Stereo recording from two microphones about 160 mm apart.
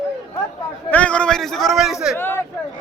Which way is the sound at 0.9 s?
10° left (ahead or behind).